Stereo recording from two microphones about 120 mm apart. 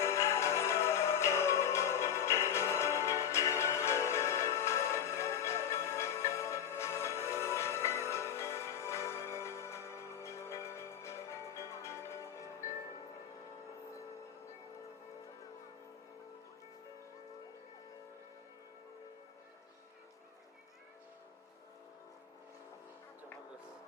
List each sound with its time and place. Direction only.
0.0 s music: 20° left (ahead or behind)